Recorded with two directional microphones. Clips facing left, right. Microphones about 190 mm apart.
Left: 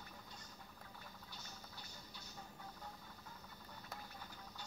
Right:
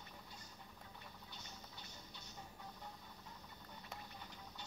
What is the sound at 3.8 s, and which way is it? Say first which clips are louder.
Printer: even; centre (ahead or behind).